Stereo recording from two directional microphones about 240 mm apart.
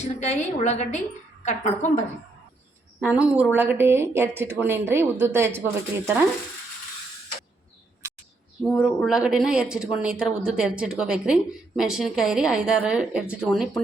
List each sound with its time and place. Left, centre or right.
0.0 s a woman's voice: left
3.0 s speech: centre
8.6 s speech: centre